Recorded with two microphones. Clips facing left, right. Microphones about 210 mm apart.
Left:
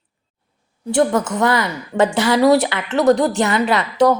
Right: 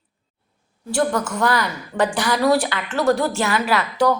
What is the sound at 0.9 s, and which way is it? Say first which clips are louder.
A woman's voice: left 4 dB; 20° left (ahead or behind).